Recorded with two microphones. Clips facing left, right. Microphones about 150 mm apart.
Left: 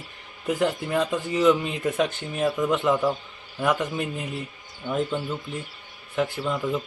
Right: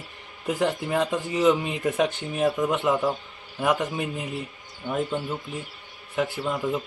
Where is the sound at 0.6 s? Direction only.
5° right (ahead or behind).